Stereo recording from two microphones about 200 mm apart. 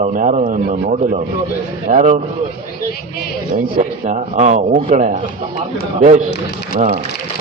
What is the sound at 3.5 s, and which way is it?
A man's voice, 40° right (ahead or behind).